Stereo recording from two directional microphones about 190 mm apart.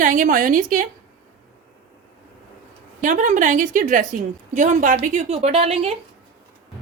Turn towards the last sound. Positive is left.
turn(degrees=-35)  # may be behind; listen again after turning